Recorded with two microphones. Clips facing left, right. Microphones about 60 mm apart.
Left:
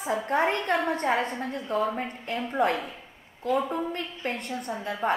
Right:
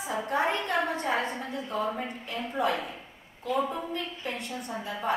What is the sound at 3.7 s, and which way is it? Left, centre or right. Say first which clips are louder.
A woman's voice: left 3 dB; left.